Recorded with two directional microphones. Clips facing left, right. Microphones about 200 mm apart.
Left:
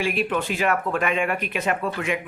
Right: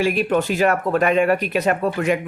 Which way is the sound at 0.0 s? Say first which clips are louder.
Right 5 dB; 40° right (ahead or behind).